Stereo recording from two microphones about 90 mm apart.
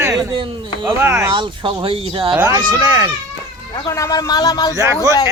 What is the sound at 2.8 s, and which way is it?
Speech, 40° right (ahead or behind).